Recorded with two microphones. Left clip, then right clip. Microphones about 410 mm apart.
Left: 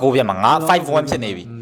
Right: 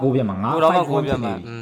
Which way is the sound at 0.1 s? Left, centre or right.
Left.